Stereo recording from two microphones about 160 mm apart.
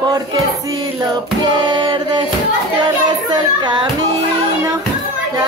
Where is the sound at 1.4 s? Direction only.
25° right (ahead or behind).